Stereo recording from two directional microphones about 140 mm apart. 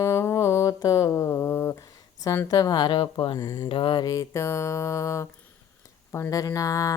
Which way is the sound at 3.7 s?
35° left (ahead or behind).